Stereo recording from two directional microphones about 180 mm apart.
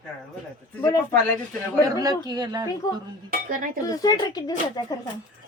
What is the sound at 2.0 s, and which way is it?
Speech, 20° right (ahead or behind).